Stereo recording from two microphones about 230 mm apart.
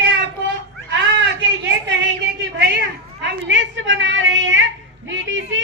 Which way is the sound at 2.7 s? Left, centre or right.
Right.